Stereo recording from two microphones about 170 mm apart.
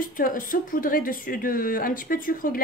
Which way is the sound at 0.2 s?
55° left (ahead or behind).